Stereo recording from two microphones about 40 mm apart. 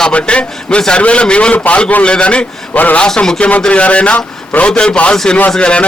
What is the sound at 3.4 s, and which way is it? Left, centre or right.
A man's voice, left.